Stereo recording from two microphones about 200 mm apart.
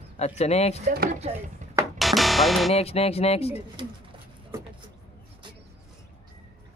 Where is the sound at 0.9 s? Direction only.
50° right (ahead or behind).